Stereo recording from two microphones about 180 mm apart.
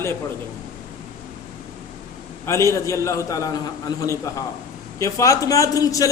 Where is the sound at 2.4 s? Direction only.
15° left (ahead or behind).